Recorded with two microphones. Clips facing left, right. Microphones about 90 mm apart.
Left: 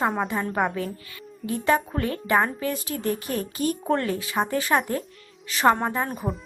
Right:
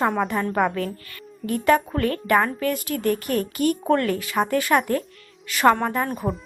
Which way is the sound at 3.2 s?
60° right (ahead or behind).